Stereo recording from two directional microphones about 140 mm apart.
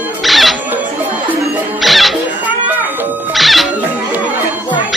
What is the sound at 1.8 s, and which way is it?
Music, centre (ahead or behind).